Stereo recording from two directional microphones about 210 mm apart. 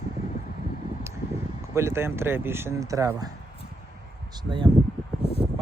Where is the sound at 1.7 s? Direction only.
10° right (ahead or behind).